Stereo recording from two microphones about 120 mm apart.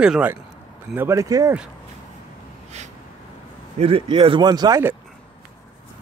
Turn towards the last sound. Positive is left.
turn(degrees=-35)  # may be behind; listen again after turning